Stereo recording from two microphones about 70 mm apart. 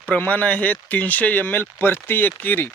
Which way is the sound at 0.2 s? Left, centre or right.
Left.